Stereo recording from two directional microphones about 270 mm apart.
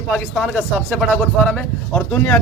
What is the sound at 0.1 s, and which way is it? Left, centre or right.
Speech, centre.